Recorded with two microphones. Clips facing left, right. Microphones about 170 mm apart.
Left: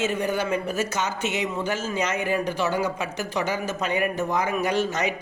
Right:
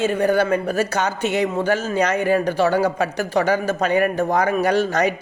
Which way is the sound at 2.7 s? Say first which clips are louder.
Right 7 dB; 35° right (ahead or behind).